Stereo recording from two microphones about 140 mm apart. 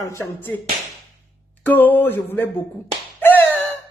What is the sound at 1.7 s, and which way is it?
Speech, 15° left (ahead or behind).